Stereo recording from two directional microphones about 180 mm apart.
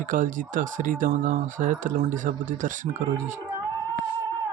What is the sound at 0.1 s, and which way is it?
Speech, 45° right (ahead or behind).